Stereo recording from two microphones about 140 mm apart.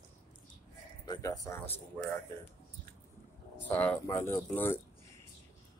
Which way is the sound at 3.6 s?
10° left (ahead or behind).